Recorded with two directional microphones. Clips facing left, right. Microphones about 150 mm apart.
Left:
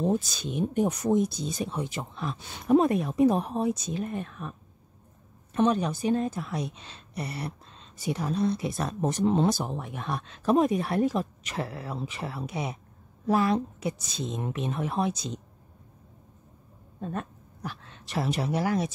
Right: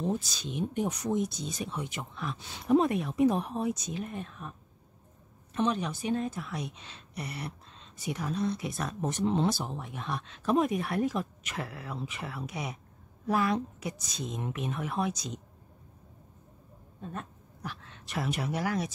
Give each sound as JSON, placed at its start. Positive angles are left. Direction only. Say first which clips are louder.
{"t": 0.0, "sound": "speech", "louder": "left 5 dB", "side_deg": 55}
{"t": 2.5, "sound": "speech", "louder": "left 3 dB", "side_deg": 45}
{"t": 4.1, "sound": "speech", "louder": "left 5 dB", "side_deg": 55}
{"t": 5.5, "sound": "speech", "louder": "left 5 dB", "side_deg": 45}
{"t": 17.0, "sound": "speech", "louder": "left 6 dB", "side_deg": 65}
{"t": 17.6, "sound": "speech", "louder": "left 3 dB", "side_deg": 35}